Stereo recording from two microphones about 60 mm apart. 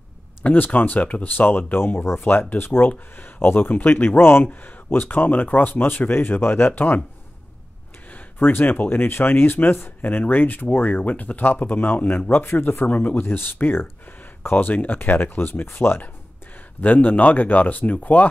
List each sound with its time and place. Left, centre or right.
0.4 s speech: left
8.4 s speech: left
16.8 s speech: left